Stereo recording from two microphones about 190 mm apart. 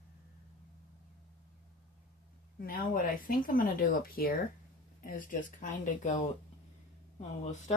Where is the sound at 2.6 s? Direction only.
50° left (ahead or behind).